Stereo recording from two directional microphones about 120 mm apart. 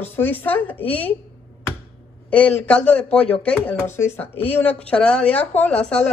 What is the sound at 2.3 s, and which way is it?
Speech, 10° left (ahead or behind).